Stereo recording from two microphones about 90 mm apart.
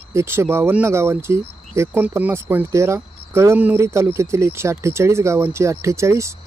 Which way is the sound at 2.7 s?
30° right (ahead or behind).